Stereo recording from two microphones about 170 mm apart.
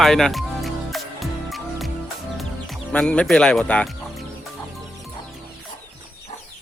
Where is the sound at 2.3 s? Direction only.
Centre (ahead or behind).